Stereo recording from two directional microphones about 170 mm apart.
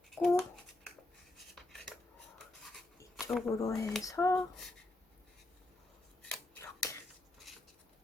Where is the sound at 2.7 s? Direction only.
Centre (ahead or behind).